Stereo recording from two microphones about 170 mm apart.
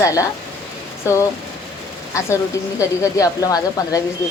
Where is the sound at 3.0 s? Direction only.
20° left (ahead or behind).